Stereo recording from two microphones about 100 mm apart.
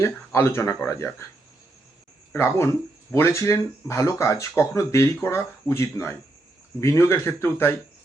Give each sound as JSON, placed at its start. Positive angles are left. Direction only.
{"t": 0.0, "sound": "speech", "side_deg": 25}
{"t": 2.3, "sound": "speech", "side_deg": 25}